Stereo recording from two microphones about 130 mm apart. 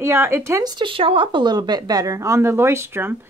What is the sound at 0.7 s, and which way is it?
A woman's voice, 40° right (ahead or behind).